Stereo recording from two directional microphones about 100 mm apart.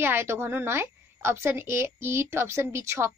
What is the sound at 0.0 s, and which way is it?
A woman's voice, 25° right (ahead or behind).